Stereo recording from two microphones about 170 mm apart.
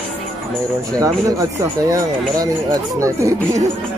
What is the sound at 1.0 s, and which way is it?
A man's voice, 20° right (ahead or behind).